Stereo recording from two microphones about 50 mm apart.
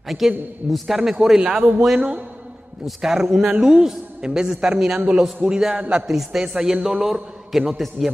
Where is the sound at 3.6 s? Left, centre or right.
Centre.